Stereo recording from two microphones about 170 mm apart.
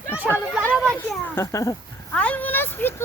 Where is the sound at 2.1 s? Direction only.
10° left (ahead or behind).